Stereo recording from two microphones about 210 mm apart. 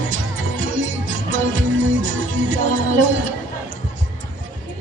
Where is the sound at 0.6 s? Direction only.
65° right (ahead or behind).